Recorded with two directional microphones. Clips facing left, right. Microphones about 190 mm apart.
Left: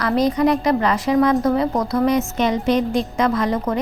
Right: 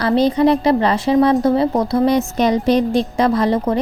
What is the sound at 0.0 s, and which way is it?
A woman's voice, 30° right (ahead or behind).